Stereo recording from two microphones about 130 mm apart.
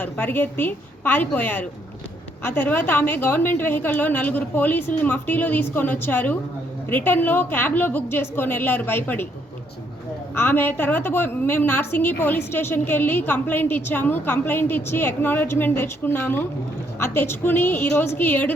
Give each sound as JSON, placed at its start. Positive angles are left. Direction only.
{"t": 0.0, "sound": "a woman's voice", "side_deg": 15}
{"t": 10.3, "sound": "a woman's voice", "side_deg": 15}